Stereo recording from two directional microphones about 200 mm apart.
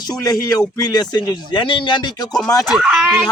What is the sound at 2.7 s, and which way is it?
Speech, centre (ahead or behind).